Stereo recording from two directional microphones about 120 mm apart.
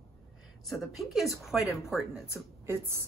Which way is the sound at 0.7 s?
Centre (ahead or behind).